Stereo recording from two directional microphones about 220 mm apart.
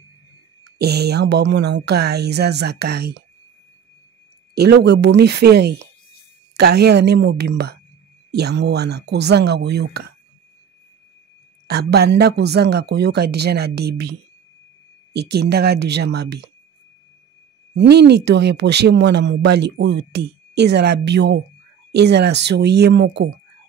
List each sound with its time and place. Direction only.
0.7 s speech: 45° right (ahead or behind)
4.6 s speech: 50° right (ahead or behind)
11.6 s speech: 45° right (ahead or behind)
15.1 s speech: 50° right (ahead or behind)
17.7 s speech: 50° right (ahead or behind)